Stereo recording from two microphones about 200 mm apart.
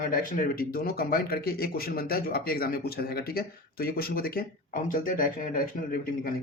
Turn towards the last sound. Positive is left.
turn(degrees=45)  # may be behind; listen again after turning